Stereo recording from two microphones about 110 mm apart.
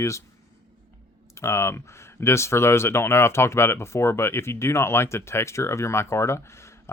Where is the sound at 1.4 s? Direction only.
25° left (ahead or behind).